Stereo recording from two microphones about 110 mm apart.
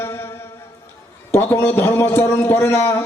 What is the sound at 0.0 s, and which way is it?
Music, 20° left (ahead or behind).